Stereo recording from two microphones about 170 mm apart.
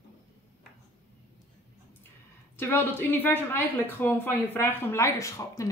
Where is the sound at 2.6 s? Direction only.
10° left (ahead or behind).